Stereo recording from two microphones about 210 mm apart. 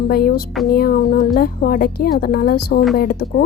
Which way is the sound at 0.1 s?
45° left (ahead or behind).